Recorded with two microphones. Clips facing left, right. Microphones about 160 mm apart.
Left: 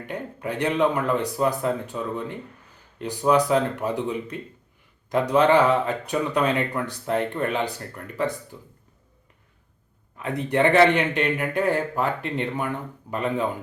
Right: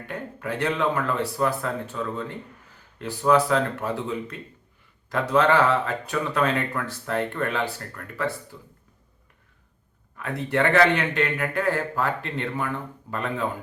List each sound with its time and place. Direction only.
0.1 s speech: 20° left (ahead or behind)
10.2 s speech: 20° left (ahead or behind)